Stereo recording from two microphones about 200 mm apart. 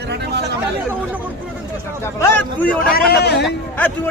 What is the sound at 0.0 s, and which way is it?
Speech, 55° right (ahead or behind).